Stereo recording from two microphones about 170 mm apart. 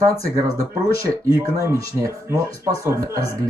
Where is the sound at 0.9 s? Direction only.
20° right (ahead or behind).